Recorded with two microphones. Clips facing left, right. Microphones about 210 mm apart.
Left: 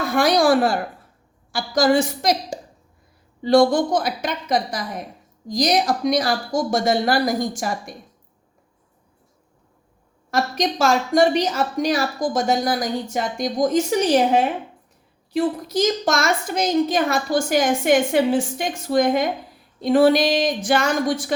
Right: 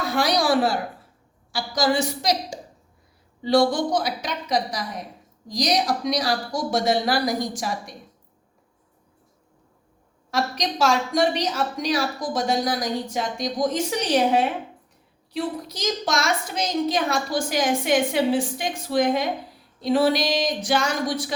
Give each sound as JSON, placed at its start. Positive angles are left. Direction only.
{"t": 0.0, "sound": "a woman's voice", "side_deg": 50}
{"t": 10.3, "sound": "a woman's voice", "side_deg": 50}
{"t": 15.3, "sound": "a woman's voice", "side_deg": 50}